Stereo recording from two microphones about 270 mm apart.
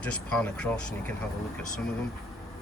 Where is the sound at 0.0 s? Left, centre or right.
Centre.